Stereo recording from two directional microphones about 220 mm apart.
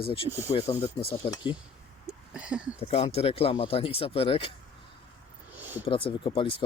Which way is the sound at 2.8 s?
25° left (ahead or behind).